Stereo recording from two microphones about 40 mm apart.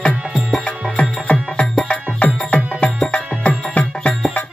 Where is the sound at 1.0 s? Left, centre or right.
Left.